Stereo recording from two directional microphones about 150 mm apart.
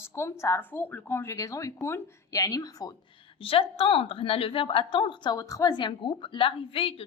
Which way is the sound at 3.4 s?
40° left (ahead or behind).